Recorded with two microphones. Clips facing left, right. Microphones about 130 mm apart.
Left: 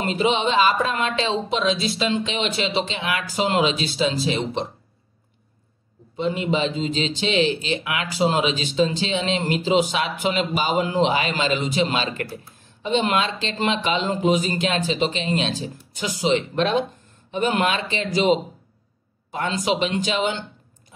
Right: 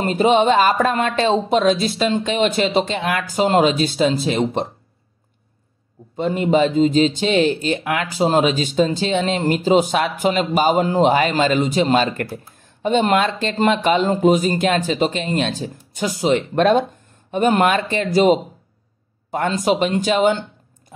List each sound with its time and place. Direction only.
0.0 s speech: 45° right (ahead or behind)
6.1 s speech: 45° right (ahead or behind)